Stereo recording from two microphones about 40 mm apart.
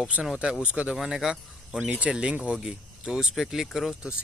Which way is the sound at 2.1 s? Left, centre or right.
Right.